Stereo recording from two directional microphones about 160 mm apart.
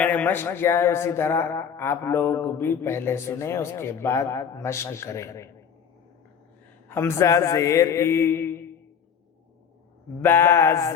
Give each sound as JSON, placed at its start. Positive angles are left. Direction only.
{"t": 0.0, "sound": "music", "side_deg": 10}
{"t": 6.8, "sound": "music", "side_deg": 15}
{"t": 10.2, "sound": "music", "side_deg": 15}